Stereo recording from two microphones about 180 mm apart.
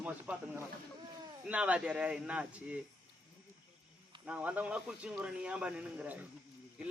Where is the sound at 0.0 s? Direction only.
10° right (ahead or behind).